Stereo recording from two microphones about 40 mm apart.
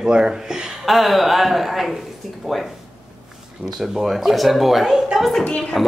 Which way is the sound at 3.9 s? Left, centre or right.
Centre.